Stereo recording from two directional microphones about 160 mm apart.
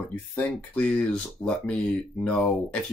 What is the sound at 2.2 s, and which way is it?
Speech, 5° left (ahead or behind).